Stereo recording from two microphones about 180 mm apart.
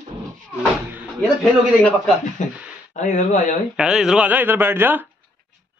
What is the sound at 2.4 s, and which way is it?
Speech, 45° left (ahead or behind).